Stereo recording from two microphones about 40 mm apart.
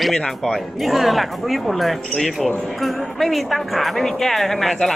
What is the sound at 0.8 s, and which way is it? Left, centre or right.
Speech, centre.